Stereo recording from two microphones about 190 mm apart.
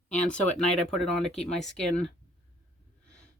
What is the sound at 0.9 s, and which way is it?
Speech, centre (ahead or behind).